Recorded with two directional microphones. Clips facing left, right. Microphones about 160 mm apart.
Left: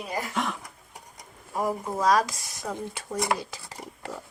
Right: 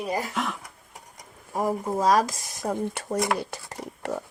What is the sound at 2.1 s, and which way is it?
Speech, 45° right (ahead or behind).